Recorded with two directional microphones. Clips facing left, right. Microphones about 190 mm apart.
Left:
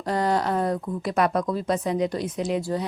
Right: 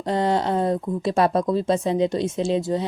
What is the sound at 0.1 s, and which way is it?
Speech, 25° right (ahead or behind).